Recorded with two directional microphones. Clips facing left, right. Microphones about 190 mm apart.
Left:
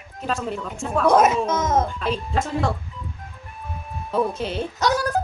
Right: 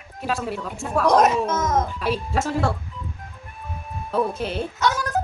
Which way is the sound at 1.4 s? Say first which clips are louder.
Left 1 dB; 20° left (ahead or behind).